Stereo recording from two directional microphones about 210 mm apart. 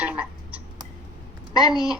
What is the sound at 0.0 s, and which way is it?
Frog, 5° right (ahead or behind).